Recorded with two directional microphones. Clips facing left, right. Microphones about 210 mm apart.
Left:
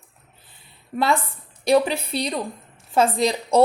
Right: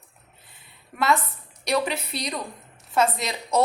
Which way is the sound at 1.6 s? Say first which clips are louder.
Left 7 dB; 30° left (ahead or behind).